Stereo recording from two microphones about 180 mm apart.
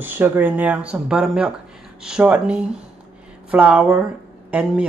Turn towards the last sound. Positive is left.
turn(degrees=-5)  # may be behind; listen again after turning